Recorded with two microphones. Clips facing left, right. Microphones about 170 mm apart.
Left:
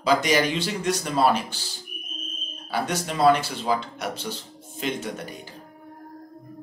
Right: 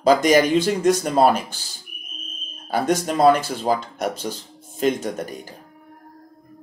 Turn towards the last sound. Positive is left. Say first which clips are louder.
# right 5 dB
turn(degrees=-45)  # may be behind; listen again after turning